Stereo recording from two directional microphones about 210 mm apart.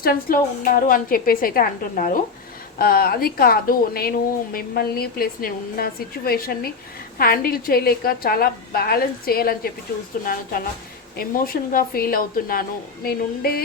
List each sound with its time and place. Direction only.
0.0 s a woman's voice: 45° left (ahead or behind)
11.2 s a woman's voice: 45° left (ahead or behind)